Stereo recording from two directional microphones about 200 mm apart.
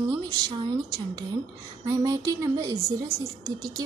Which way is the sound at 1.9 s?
15° right (ahead or behind).